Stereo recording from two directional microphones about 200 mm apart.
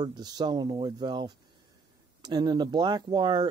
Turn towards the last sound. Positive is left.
turn(degrees=-20)  # may be behind; listen again after turning